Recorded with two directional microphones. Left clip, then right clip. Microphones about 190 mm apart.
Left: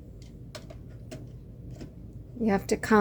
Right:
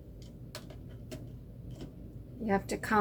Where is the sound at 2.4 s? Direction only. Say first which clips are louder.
Left 5 dB; 60° left (ahead or behind).